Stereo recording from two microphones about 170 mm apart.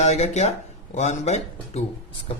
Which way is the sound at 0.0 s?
40° left (ahead or behind).